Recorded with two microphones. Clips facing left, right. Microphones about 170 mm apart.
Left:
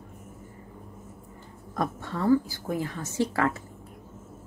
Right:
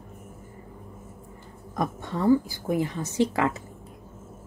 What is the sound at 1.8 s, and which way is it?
Speech, 15° right (ahead or behind).